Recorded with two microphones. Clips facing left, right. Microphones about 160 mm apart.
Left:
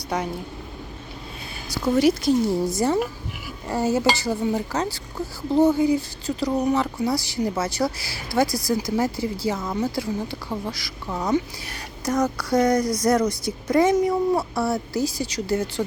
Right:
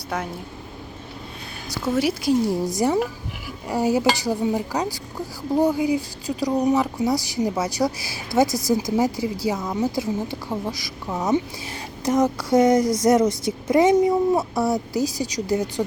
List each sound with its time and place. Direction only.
1.7 s a woman's voice: 5° right (ahead or behind)
10.5 s a sound: 20° right (ahead or behind)
13.0 s speech: 20° right (ahead or behind)